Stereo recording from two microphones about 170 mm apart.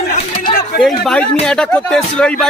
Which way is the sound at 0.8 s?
Centre (ahead or behind).